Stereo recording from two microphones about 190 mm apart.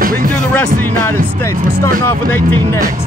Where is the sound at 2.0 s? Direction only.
10° left (ahead or behind).